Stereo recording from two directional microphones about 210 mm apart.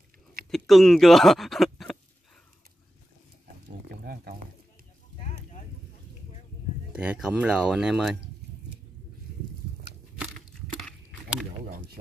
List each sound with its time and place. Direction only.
0.5 s speech: centre (ahead or behind)
3.6 s pig: 45° right (ahead or behind)
6.9 s speech: 5° right (ahead or behind)
10.8 s rowboat: 5° right (ahead or behind)